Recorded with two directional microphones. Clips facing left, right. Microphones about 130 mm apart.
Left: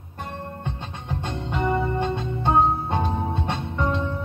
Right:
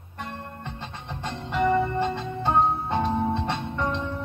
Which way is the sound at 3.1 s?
15° left (ahead or behind).